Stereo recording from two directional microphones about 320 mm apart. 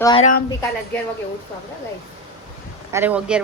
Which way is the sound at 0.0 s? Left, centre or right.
Centre.